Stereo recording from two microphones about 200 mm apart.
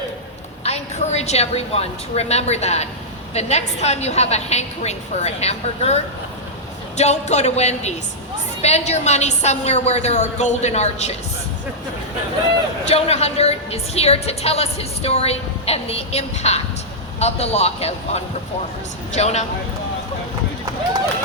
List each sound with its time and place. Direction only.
0.6 s a woman's voice: 30° left (ahead or behind)
12.8 s a woman's voice: 30° left (ahead or behind)